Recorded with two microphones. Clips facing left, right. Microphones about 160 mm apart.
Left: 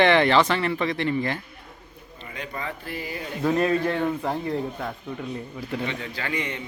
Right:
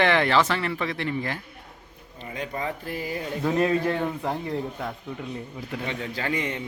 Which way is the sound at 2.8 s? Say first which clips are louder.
Right 2 dB; 40° right (ahead or behind).